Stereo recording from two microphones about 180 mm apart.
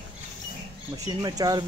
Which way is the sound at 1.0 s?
20° right (ahead or behind).